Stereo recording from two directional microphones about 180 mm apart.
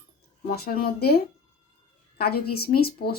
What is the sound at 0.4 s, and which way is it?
Speech, 60° left (ahead or behind).